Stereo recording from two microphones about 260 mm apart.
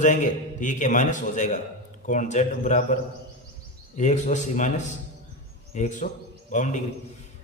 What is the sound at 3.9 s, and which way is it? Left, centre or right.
A man's voice, left.